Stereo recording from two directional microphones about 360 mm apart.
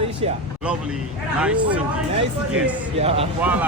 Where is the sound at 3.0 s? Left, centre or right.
Centre.